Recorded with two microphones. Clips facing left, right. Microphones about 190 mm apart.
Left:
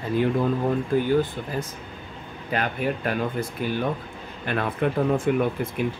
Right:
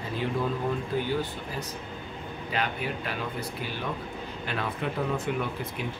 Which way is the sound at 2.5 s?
50° left (ahead or behind).